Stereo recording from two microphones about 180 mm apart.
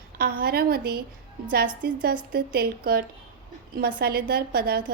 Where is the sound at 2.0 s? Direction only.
60° right (ahead or behind).